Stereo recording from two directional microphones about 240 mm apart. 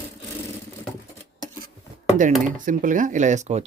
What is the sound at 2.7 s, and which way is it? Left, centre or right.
Speech, right.